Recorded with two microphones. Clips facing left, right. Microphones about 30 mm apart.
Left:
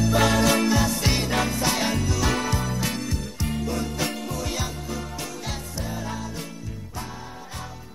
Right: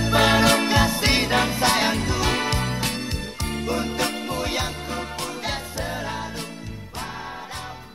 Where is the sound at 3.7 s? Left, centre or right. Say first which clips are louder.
Right 6 dB; right.